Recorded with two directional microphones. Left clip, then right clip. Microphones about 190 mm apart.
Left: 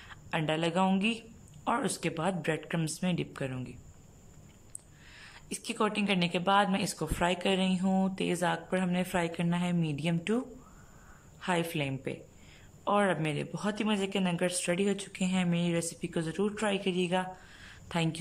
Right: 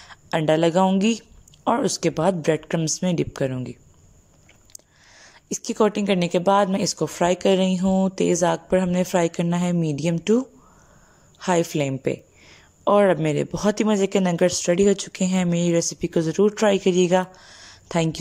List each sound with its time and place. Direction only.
0.0 s a woman's voice: 30° right (ahead or behind)
5.1 s a woman's voice: 35° right (ahead or behind)